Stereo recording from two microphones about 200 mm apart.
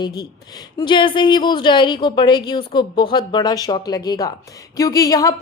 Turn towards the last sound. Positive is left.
turn(degrees=15)  # may be behind; listen again after turning